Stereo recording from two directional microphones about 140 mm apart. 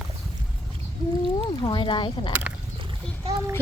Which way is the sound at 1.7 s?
35° left (ahead or behind).